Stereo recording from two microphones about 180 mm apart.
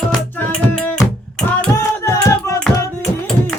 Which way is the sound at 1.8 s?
15° left (ahead or behind).